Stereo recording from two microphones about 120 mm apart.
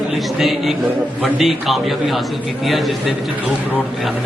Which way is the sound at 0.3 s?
Centre (ahead or behind).